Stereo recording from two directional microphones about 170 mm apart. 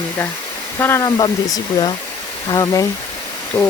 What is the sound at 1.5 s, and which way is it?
Speech, 25° left (ahead or behind).